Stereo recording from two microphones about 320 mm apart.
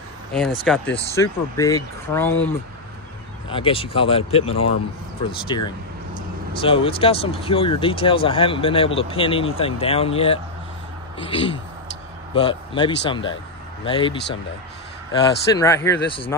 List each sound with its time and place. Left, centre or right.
0.7 s speech: centre
3.4 s speech: centre
15.5 s speech: centre